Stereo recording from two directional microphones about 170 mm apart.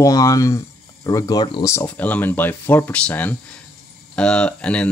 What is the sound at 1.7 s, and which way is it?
Speech, 10° left (ahead or behind).